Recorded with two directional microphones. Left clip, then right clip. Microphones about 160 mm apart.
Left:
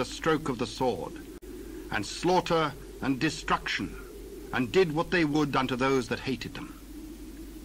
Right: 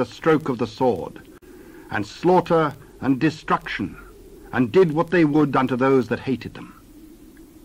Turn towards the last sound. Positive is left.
turn(degrees=30)  # may be behind; listen again after turning